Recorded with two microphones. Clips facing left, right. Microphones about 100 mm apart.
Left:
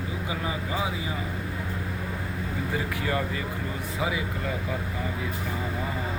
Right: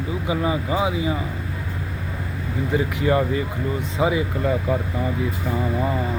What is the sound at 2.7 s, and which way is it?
Speech, 20° right (ahead or behind).